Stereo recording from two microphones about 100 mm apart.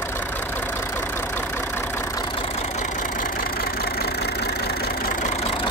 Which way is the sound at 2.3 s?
80° left.